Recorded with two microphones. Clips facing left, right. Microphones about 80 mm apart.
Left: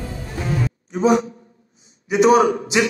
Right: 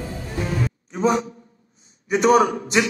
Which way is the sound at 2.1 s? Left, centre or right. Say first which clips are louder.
Left 2 dB; right.